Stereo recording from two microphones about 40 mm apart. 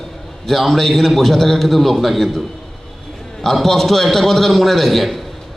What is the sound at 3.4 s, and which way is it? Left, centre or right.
A man's voice, centre.